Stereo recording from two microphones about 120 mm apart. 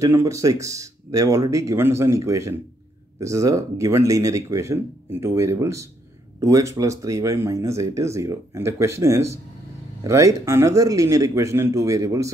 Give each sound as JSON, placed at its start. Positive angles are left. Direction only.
{"t": 0.0, "sound": "speech", "side_deg": -25}